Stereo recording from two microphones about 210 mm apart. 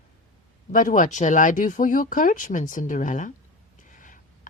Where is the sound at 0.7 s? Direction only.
40° left (ahead or behind).